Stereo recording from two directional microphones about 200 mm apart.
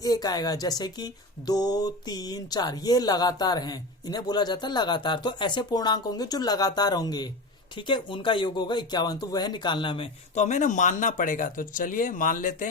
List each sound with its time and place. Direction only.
0.0 s speech: 20° left (ahead or behind); by 12.6 s 40° left (ahead or behind)